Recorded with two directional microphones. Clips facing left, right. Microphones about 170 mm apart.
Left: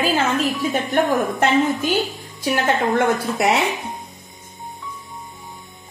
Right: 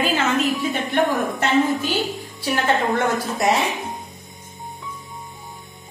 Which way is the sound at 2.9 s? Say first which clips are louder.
Left 3 dB; 65° left (ahead or behind).